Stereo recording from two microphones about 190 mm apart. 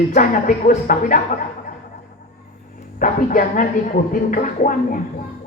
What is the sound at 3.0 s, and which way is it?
A man's voice, 45° left (ahead or behind).